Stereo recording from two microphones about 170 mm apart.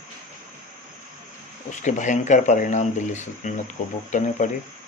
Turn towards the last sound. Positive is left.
turn(degrees=45)  # may be behind; listen again after turning